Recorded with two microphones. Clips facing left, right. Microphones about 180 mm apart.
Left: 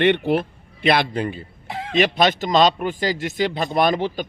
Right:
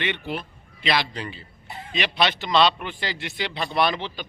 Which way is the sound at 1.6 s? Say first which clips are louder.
Left 9 dB; 90° left.